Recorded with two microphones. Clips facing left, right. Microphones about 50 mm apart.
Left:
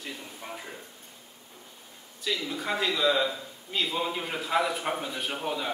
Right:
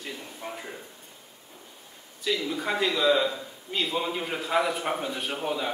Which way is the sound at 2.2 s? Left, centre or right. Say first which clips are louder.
Right 3 dB; centre.